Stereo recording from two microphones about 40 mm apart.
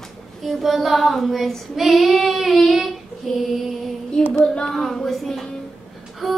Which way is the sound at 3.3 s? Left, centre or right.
Centre.